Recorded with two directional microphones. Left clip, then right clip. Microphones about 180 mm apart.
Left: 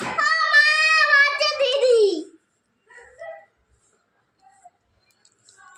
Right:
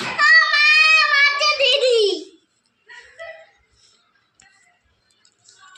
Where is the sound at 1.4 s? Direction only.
Centre (ahead or behind).